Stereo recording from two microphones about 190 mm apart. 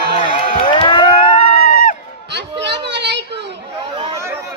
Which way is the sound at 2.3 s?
65° right (ahead or behind).